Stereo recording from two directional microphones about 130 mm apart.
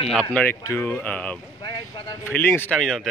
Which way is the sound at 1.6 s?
35° left (ahead or behind).